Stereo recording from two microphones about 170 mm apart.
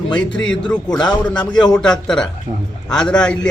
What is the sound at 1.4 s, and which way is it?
Speech, 25° left (ahead or behind).